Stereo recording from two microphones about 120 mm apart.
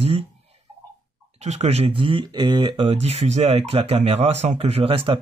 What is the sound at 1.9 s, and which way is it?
Speech, 45° right (ahead or behind).